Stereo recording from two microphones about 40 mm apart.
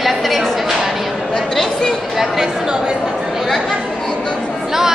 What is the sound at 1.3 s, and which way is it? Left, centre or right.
Chatter, centre.